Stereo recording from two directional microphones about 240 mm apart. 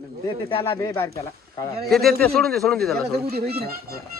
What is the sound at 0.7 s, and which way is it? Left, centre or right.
Speech, centre.